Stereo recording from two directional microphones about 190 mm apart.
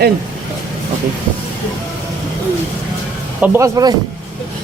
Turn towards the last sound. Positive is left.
turn(degrees=-20)  # may be behind; listen again after turning